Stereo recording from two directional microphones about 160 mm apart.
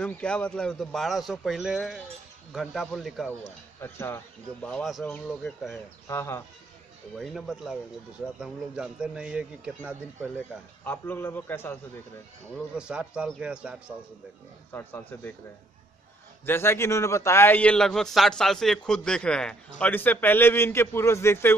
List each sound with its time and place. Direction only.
0.0 s a man's voice: 5° left (ahead or behind)
3.8 s a man's voice: 15° left (ahead or behind)
4.6 s a man's voice: centre (ahead or behind)
7.2 s a man's voice: centre (ahead or behind)
10.8 s a man's voice: 10° left (ahead or behind)
12.7 s a man's voice: 5° right (ahead or behind)
14.7 s a man's voice: 15° left (ahead or behind)
16.4 s a man's voice: 15° left (ahead or behind)